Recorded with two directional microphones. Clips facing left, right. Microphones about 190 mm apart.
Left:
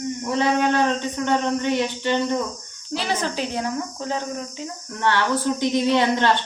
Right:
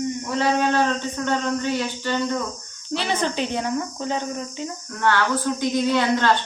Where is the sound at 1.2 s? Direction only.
20° left (ahead or behind).